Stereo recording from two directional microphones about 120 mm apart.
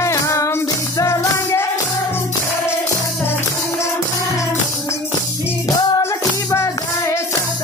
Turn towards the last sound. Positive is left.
turn(degrees=25)  # may be behind; listen again after turning